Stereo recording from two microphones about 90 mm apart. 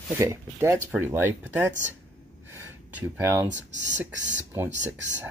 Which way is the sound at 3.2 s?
30° right (ahead or behind).